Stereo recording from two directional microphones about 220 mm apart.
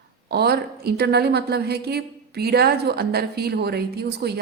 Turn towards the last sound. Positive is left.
turn(degrees=-45)  # may be behind; listen again after turning